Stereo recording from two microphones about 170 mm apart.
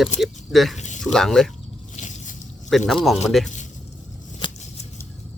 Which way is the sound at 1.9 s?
45° left (ahead or behind).